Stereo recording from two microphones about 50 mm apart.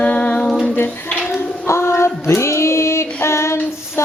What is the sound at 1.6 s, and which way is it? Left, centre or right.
Female singing, left.